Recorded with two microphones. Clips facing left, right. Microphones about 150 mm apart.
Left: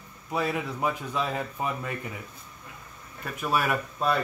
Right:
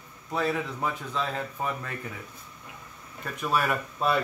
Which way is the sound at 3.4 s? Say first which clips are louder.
Even; 5° left (ahead or behind).